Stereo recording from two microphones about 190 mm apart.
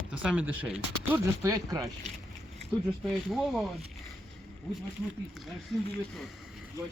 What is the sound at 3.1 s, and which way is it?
Speech, centre (ahead or behind).